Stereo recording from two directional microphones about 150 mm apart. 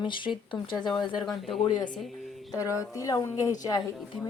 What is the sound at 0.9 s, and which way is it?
Speech, centre (ahead or behind).